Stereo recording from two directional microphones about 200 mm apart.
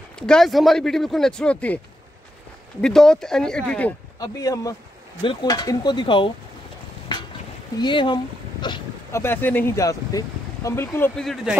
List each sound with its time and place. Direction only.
0.3 s speech: centre (ahead or behind)
2.8 s speech: 5° left (ahead or behind)
4.2 s speech: 15° left (ahead or behind)
7.8 s speech: 25° left (ahead or behind)
9.2 s speech: 10° left (ahead or behind)
11.2 s speech: centre (ahead or behind)